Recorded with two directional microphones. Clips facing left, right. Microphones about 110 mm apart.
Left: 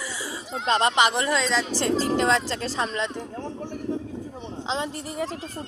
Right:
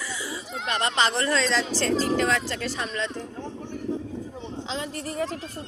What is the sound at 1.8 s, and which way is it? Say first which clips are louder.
Speech: left 1 dB; 25° left (ahead or behind).